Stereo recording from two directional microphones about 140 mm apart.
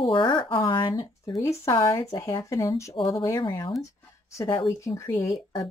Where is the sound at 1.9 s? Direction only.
25° left (ahead or behind).